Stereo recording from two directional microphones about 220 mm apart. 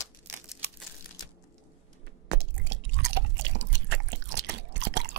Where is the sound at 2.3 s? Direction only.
55° right (ahead or behind).